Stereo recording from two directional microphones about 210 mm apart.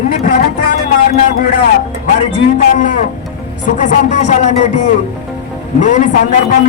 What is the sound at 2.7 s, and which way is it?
A man's voice, 35° left (ahead or behind).